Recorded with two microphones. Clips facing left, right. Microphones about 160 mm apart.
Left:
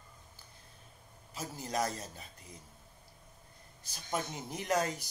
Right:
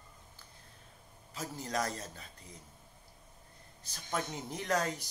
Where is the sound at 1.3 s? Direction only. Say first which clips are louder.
Left 1 dB; 20° left (ahead or behind).